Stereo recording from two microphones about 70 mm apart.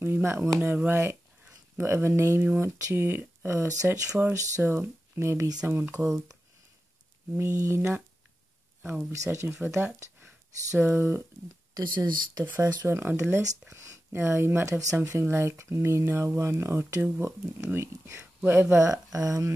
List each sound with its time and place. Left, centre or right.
0.0 s a sound: right
0.6 s speech: right
2.4 s speech: right
7.3 s speech: right
9.3 s speech: right
11.7 s speech: right
12.4 s speech: right
13.7 s speech: right
14.1 s speech: right
19.1 s speech: right